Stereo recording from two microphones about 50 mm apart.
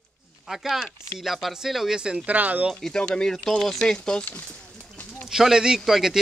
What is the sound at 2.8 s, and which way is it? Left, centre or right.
Speech, centre.